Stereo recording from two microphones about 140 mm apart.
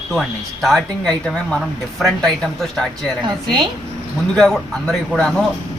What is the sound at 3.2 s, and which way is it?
Speech, 30° right (ahead or behind).